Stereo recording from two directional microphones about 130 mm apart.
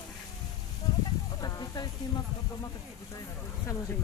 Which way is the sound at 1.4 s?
30° left (ahead or behind).